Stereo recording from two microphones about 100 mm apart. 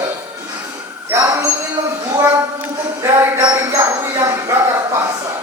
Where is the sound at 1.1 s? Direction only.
35° right (ahead or behind).